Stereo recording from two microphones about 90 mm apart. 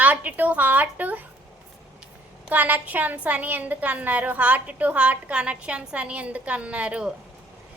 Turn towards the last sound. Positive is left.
turn(degrees=-15)  # may be behind; listen again after turning